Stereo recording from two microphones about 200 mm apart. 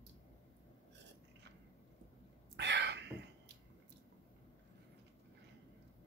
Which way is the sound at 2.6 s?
60° right (ahead or behind).